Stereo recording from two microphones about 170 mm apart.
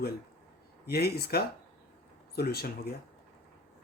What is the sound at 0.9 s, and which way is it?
Speech, 70° left (ahead or behind).